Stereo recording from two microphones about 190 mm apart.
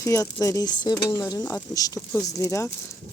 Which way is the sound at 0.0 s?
15° left (ahead or behind).